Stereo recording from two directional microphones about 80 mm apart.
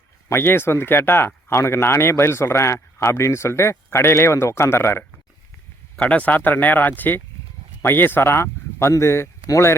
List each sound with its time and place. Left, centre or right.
0.3 s speech: left
6.0 s speech: centre; by 9.7 s left